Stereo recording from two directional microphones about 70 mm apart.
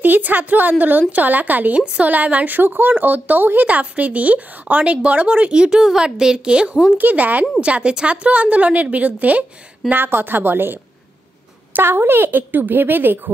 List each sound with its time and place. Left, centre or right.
0.0 s a woman's voice: right
7.0 s a woman's voice: right